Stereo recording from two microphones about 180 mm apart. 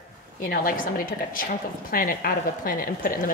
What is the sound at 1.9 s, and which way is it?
A woman's voice, 55° left (ahead or behind).